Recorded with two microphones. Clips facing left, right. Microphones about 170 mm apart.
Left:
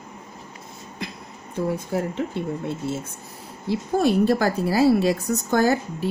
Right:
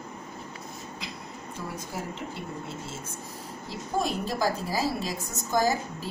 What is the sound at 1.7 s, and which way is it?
A woman's voice, 60° left (ahead or behind).